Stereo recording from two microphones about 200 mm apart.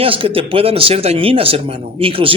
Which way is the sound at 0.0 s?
30° right (ahead or behind).